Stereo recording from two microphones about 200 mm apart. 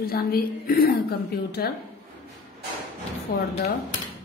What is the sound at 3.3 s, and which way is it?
Speech, 50° left (ahead or behind).